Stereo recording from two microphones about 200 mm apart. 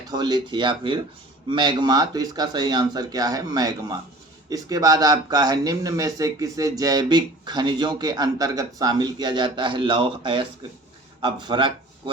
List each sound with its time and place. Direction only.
0.1 s speech: 20° right (ahead or behind)